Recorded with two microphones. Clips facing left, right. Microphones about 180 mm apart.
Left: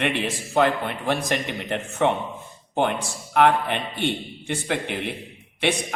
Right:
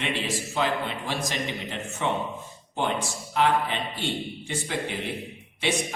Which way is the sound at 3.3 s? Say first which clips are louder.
Left 5 dB; 60° left (ahead or behind).